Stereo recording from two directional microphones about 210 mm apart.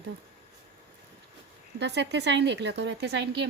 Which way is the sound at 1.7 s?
55° right (ahead or behind).